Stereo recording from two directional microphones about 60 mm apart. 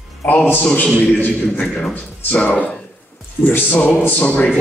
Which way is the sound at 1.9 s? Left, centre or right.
Left.